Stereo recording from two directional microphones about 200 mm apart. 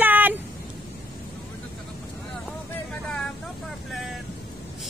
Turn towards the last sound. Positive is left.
turn(degrees=0)  # may be behind; listen again after turning